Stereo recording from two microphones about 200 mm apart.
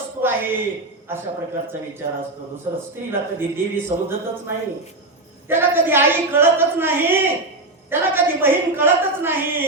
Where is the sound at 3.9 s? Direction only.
35° right (ahead or behind).